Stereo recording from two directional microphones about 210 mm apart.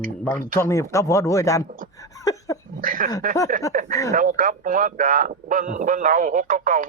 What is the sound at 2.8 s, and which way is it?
Speech, 40° right (ahead or behind).